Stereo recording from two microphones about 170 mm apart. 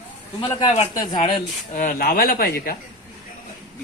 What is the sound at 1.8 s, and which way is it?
Speech, 55° left (ahead or behind).